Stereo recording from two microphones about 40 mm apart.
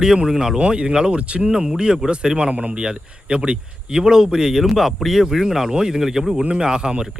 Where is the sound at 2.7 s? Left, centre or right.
Right.